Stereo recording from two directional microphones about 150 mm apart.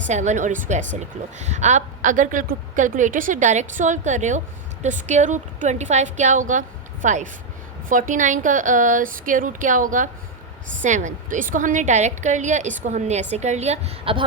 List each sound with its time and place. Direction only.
0.1 s a woman's voice: 50° right (ahead or behind); by 14.3 s 35° right (ahead or behind)